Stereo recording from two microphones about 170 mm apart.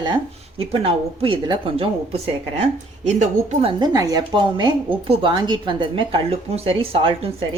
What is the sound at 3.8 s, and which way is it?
A woman's voice, 20° right (ahead or behind).